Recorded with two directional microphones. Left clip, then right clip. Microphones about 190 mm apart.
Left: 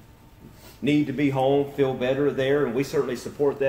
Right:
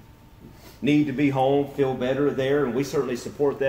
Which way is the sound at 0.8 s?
5° left (ahead or behind).